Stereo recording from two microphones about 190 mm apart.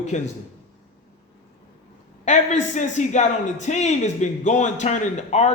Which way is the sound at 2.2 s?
40° left (ahead or behind).